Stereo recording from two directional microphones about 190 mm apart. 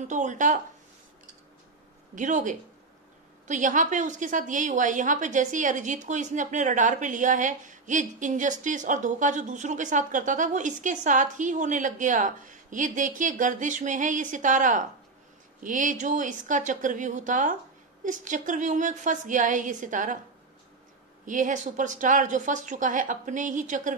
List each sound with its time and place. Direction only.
0.1 s a woman's voice: 40° right (ahead or behind)
2.1 s a woman's voice: 40° right (ahead or behind)
21.3 s a woman's voice: 40° right (ahead or behind)